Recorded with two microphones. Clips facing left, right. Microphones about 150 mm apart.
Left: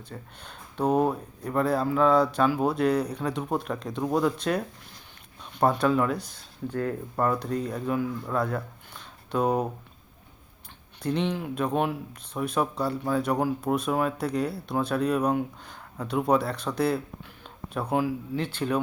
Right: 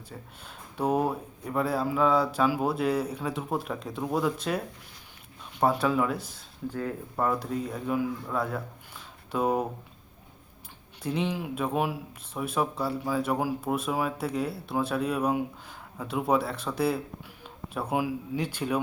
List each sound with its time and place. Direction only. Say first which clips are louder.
0.1 s speech: left 1 dB; 5° right (ahead or behind)
11.0 s speech: left 2 dB; 5° right (ahead or behind)